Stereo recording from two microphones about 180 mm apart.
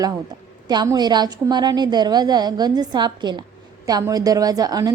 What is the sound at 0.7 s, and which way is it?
A woman's voice, 25° right (ahead or behind).